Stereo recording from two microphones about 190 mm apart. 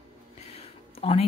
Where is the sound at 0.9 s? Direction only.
30° left (ahead or behind).